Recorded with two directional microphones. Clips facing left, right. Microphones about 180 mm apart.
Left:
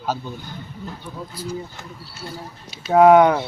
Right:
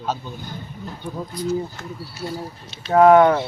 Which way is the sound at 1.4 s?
10° left (ahead or behind).